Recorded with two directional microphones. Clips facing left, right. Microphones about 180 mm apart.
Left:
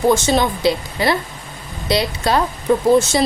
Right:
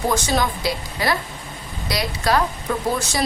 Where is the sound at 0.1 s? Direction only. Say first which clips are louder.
Left 5 dB; 25° left (ahead or behind).